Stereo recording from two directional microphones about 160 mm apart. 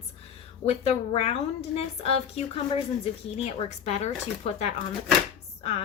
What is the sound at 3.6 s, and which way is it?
Speech, 45° left (ahead or behind).